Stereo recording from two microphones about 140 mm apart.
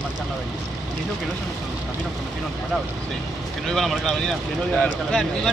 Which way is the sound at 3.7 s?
Centre (ahead or behind).